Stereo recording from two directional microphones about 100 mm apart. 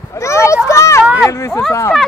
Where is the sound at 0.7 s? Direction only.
30° left (ahead or behind).